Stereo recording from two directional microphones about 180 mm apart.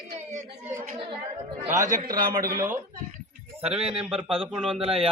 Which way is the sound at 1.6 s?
45° right (ahead or behind).